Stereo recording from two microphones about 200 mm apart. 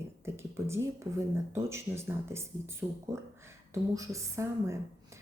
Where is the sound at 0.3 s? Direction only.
15° right (ahead or behind).